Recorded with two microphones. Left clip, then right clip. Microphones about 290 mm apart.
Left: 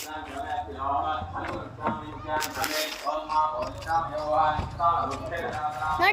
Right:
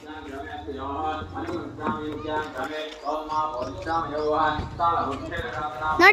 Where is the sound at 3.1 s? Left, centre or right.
Centre.